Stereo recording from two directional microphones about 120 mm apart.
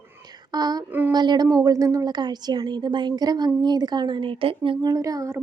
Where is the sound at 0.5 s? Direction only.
35° right (ahead or behind).